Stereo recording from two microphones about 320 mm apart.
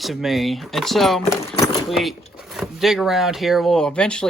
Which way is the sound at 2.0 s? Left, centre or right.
Centre.